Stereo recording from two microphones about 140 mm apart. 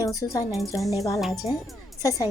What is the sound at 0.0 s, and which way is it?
Speech, 25° left (ahead or behind).